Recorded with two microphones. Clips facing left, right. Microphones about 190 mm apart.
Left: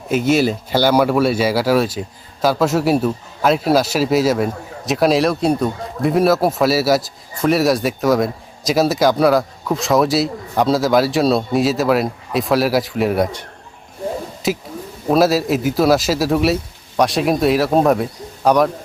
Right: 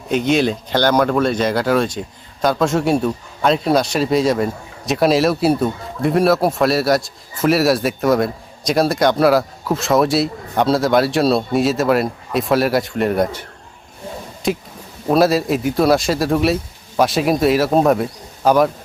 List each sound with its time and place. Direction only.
0.1 s speech: 5° left (ahead or behind)
14.4 s speech: centre (ahead or behind)